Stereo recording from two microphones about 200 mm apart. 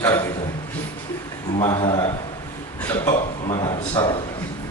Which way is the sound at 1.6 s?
15° left (ahead or behind).